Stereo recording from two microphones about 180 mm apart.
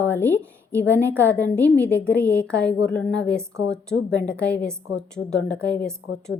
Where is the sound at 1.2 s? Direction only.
10° left (ahead or behind).